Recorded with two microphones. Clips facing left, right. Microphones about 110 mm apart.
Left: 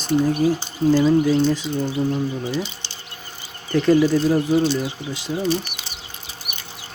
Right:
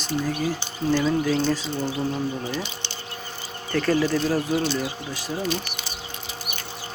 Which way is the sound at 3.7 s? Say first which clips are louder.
Left 6 dB; 20° left (ahead or behind).